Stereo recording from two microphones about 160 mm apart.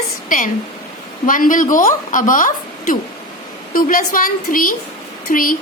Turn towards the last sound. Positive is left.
turn(degrees=60)  # may be behind; listen again after turning